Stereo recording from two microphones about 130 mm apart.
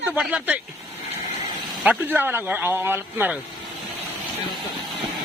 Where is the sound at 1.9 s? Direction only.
15° right (ahead or behind).